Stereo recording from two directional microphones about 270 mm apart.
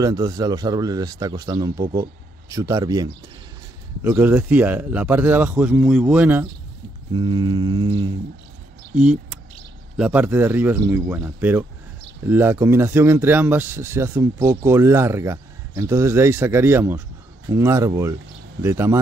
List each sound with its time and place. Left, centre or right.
0.0 s speech: centre
7.2 s speech: centre
8.9 s speech: centre